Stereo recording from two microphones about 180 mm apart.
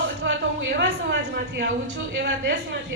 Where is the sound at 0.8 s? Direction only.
70° right (ahead or behind).